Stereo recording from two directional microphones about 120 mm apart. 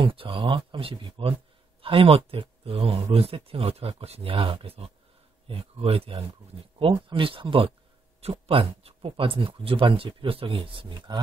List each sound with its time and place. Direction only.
0.0 s speech: 50° right (ahead or behind)